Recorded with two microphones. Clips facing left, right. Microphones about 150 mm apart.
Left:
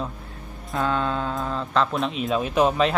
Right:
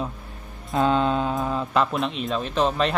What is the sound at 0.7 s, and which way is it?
Mantra, 20° right (ahead or behind).